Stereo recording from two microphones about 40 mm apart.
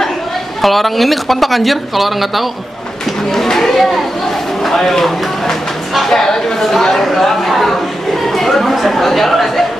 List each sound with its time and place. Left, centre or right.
0.6 s speech: centre